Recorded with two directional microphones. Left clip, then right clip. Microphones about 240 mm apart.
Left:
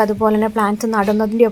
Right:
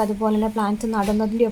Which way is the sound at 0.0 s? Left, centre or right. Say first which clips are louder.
Left 6 dB; left.